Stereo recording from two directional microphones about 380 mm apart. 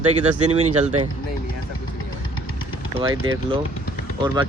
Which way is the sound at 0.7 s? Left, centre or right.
Centre.